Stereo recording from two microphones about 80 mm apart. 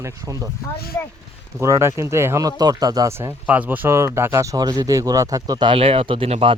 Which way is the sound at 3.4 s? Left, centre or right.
Centre.